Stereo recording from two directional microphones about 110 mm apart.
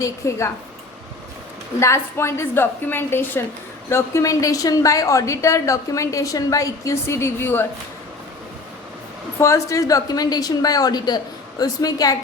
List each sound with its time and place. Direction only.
0.0 s a woman's voice: 25° left (ahead or behind)
1.8 s a woman's voice: 25° left (ahead or behind)
9.4 s a woman's voice: 30° left (ahead or behind)